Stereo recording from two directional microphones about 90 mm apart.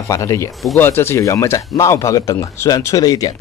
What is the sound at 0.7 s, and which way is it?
Speech, 25° left (ahead or behind).